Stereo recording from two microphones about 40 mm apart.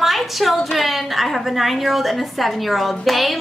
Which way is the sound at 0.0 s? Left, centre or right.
Centre.